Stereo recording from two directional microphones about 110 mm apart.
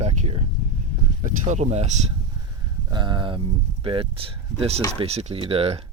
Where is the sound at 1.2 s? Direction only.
90° right.